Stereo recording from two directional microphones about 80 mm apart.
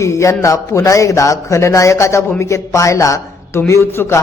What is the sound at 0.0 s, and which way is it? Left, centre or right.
Speech, left.